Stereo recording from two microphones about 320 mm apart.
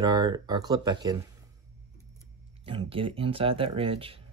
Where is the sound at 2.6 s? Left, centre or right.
Centre.